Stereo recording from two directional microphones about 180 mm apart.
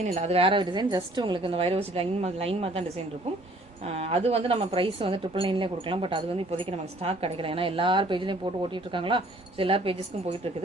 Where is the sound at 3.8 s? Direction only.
35° right (ahead or behind).